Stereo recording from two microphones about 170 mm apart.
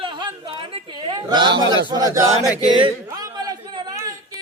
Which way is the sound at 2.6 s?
25° left (ahead or behind).